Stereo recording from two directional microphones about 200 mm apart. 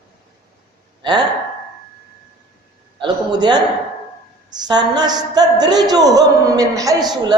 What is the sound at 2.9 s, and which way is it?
Speech, 20° right (ahead or behind).